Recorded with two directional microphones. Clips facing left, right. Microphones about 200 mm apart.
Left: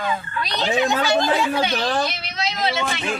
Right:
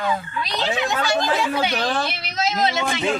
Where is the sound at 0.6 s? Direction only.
20° left (ahead or behind).